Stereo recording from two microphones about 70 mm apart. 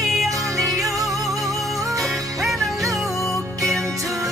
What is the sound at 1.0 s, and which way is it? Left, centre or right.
Music, centre.